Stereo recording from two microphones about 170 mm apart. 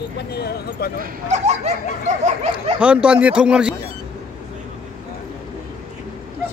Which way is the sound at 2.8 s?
5° right (ahead or behind).